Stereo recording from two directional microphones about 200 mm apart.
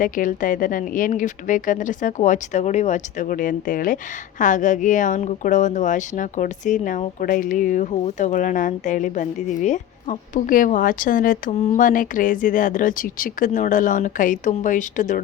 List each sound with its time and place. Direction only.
0.0 s speech: 40° left (ahead or behind)